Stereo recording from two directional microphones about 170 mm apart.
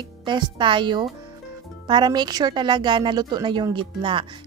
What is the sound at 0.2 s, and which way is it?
A woman's voice, 30° right (ahead or behind).